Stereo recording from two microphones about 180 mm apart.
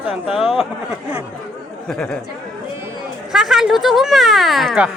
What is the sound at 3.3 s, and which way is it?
Speech, centre (ahead or behind).